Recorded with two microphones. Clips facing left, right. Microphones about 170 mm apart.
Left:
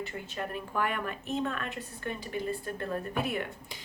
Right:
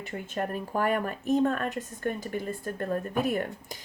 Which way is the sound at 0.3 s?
45° right (ahead or behind).